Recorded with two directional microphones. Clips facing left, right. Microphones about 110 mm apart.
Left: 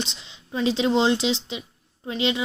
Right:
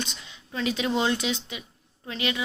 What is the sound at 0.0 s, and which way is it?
Speech, 25° left (ahead or behind).